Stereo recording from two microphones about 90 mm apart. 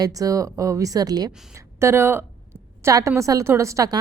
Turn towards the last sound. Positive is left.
turn(degrees=-35)  # may be behind; listen again after turning